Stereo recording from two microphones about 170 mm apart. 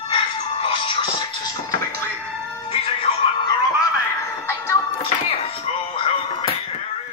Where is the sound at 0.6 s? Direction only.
30° left (ahead or behind).